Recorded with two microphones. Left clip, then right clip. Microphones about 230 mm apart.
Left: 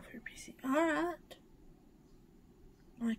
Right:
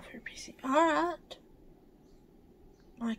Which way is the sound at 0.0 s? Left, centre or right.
Centre.